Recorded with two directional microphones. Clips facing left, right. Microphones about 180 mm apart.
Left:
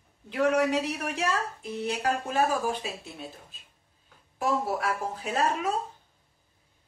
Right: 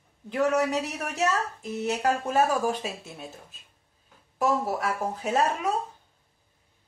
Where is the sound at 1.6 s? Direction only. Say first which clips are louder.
Right 3 dB; 45° right (ahead or behind).